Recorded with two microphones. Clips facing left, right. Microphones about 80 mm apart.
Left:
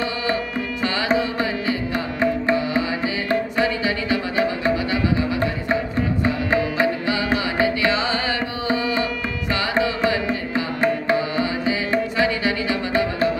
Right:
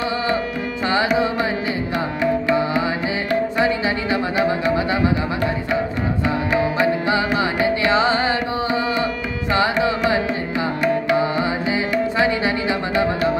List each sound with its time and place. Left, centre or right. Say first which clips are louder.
1.1 s carnatic music: right 2 dB; right
3.5 s music: right 2 dB; right
7.1 s music: right 3 dB; right
10.5 s music: right 2 dB; left
11.1 s music: right 3 dB; right